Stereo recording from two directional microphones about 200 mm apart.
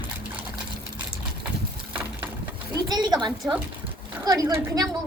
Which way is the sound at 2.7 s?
20° right (ahead or behind).